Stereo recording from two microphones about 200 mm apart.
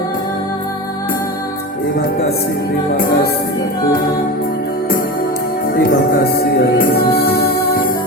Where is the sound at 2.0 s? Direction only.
50° left (ahead or behind).